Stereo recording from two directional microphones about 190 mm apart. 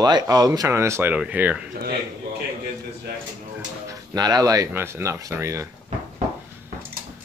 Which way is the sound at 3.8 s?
20° right (ahead or behind).